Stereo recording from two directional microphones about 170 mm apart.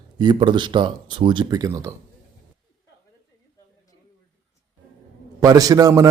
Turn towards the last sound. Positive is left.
turn(degrees=-20)  # may be behind; listen again after turning